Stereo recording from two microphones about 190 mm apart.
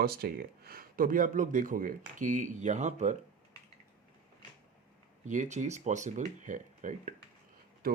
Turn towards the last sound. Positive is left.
turn(degrees=-50)  # may be behind; listen again after turning